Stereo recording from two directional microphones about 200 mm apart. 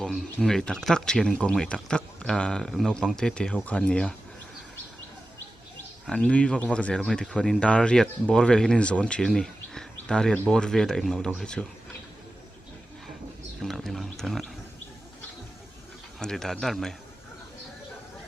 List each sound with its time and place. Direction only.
0.0 s speech: centre (ahead or behind)
6.1 s speech: 5° left (ahead or behind)
13.6 s speech: centre (ahead or behind)
16.1 s speech: centre (ahead or behind)